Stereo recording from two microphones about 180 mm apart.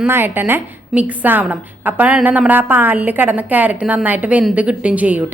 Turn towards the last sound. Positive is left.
turn(degrees=-10)  # may be behind; listen again after turning